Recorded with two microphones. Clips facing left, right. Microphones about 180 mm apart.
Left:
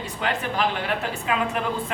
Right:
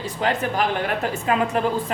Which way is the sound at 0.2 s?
35° right (ahead or behind).